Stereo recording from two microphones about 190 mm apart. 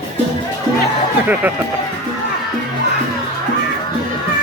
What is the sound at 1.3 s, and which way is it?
Speech, 10° right (ahead or behind).